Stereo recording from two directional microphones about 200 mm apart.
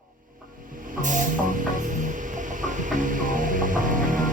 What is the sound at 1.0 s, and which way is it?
Music, 40° right (ahead or behind).